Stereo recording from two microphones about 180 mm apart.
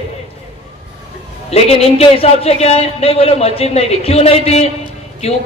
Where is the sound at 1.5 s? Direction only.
35° left (ahead or behind).